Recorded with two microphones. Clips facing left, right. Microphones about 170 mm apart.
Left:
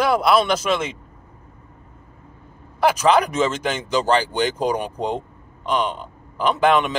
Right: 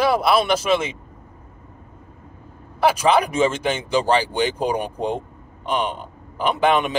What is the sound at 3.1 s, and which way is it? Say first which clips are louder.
Speech: even; 10° right (ahead or behind).